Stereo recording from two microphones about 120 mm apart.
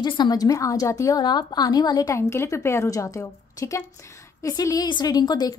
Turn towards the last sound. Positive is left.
turn(degrees=35)  # may be behind; listen again after turning